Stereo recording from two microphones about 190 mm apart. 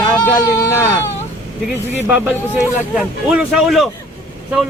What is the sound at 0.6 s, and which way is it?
Speech, 15° left (ahead or behind).